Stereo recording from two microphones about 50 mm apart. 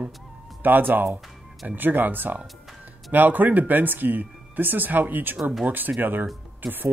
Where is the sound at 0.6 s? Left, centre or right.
Right.